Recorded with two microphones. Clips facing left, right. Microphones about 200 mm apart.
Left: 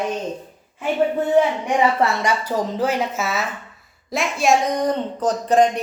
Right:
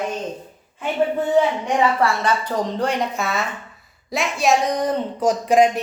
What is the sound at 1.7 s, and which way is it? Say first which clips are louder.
A woman's voice: left 1 dB; 15° left (ahead or behind).